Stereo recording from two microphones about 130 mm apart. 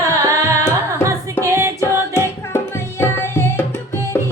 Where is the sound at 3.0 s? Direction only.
20° left (ahead or behind).